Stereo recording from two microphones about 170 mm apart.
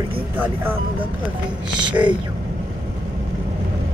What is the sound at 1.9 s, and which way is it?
Speech, 30° right (ahead or behind).